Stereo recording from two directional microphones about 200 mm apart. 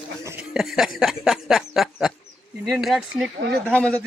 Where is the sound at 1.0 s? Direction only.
5° right (ahead or behind).